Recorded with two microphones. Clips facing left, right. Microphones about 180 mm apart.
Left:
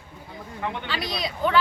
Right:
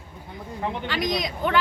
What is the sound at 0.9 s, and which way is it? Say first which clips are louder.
Speech: right 4 dB; 15° right (ahead or behind).